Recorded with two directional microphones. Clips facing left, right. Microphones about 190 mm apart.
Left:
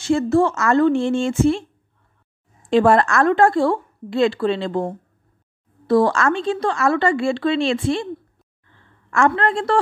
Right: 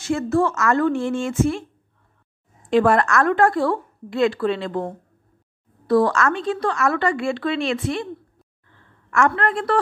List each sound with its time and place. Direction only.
0.0 s a woman's voice: 25° left (ahead or behind)
2.7 s a woman's voice: 30° left (ahead or behind)
9.1 s a woman's voice: 30° left (ahead or behind)